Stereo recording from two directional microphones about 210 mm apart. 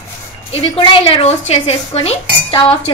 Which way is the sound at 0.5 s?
25° left (ahead or behind).